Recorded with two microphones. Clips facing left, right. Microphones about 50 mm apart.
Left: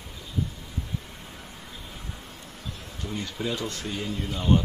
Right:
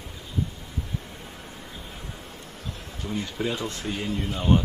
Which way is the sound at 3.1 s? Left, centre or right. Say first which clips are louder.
Right 2 dB; centre.